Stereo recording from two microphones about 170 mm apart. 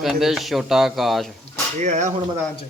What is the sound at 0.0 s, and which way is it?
Speech, centre (ahead or behind).